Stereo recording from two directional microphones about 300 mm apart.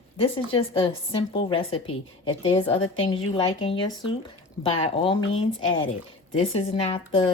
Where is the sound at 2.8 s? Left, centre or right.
Left.